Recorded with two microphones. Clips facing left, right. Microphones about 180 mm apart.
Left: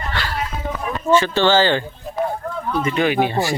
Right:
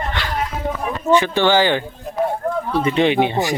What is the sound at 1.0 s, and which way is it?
Speech, 15° right (ahead or behind).